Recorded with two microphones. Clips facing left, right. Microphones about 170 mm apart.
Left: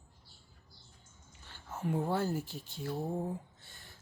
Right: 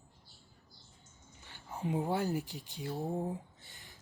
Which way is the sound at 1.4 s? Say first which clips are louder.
Even; 15° right (ahead or behind).